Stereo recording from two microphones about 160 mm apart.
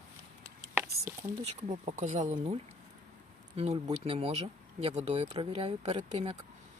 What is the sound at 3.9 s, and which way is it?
Speech, 40° right (ahead or behind).